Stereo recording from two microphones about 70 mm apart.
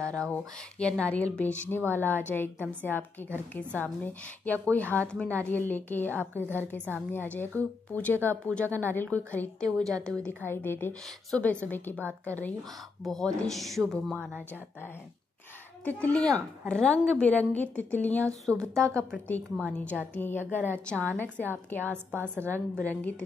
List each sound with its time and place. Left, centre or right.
0.3 s a woman's voice: centre
10.4 s a woman's voice: left
13.0 s speech: centre
15.8 s a woman's voice: left
18.5 s a woman's voice: right
19.6 s a woman's voice: centre